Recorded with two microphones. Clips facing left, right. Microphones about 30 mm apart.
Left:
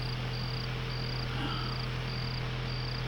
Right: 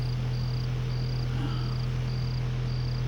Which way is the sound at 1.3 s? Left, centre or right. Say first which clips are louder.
Right 1 dB; left.